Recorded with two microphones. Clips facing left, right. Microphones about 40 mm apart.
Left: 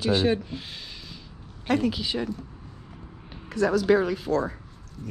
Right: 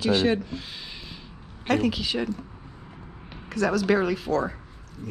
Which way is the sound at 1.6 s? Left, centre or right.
Right.